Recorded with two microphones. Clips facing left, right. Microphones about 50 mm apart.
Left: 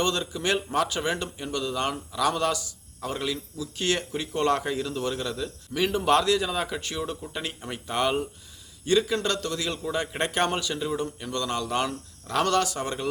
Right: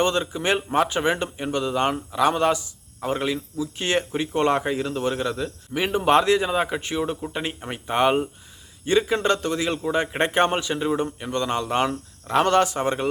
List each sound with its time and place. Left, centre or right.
0.0 s speech: right